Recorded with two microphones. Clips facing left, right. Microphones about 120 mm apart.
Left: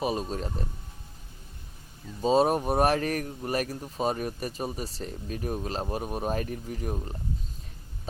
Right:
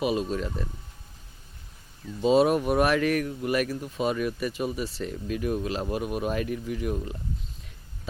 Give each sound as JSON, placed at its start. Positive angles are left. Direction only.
{"t": 0.0, "sound": "speech", "side_deg": 40}
{"t": 2.2, "sound": "speech", "side_deg": 40}